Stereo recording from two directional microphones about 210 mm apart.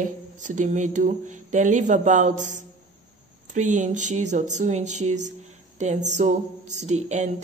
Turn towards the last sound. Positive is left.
turn(degrees=-35)  # may be behind; listen again after turning